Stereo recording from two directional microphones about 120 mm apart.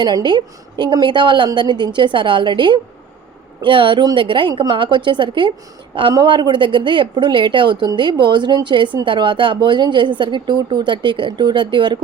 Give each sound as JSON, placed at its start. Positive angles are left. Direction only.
{"t": 0.0, "sound": "speech", "side_deg": -40}